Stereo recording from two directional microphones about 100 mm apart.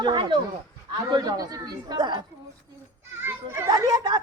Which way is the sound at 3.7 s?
40° right (ahead or behind).